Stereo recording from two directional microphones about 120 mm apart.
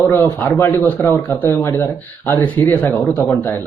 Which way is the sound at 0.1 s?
15° left (ahead or behind).